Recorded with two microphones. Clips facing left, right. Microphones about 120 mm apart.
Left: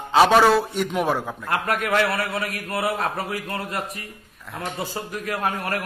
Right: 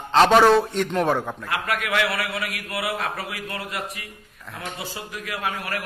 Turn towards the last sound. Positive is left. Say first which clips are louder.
# left 3 dB
turn(degrees=45)  # may be behind; listen again after turning